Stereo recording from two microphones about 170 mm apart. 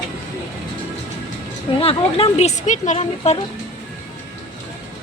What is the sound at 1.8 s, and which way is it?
Speech, 35° left (ahead or behind).